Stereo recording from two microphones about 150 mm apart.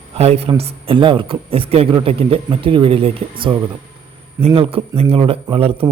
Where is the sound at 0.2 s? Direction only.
45° right (ahead or behind).